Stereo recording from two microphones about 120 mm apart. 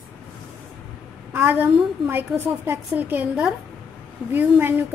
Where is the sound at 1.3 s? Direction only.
15° right (ahead or behind).